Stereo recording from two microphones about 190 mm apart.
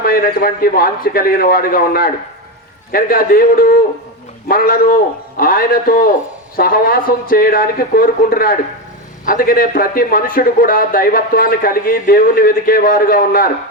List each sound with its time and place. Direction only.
0.0 s a man's voice: 50° left (ahead or behind)